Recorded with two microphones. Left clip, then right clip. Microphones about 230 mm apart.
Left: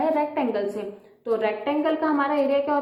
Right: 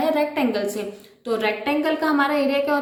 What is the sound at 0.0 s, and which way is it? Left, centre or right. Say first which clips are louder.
A woman's voice: right 2 dB; right.